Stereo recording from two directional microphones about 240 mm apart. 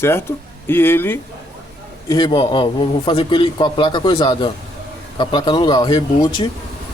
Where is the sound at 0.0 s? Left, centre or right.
Centre.